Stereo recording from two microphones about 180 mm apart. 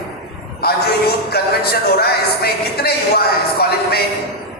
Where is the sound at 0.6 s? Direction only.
60° left (ahead or behind).